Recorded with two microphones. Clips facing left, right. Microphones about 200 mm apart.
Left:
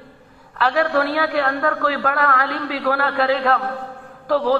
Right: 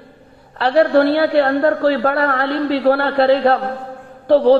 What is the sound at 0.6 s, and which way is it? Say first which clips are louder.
A man's voice: right 6 dB; 30° right (ahead or behind).